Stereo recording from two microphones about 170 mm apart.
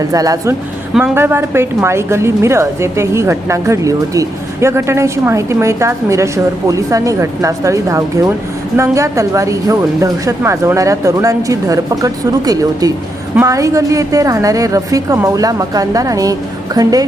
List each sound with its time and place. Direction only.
0.1 s a woman's voice: 20° right (ahead or behind)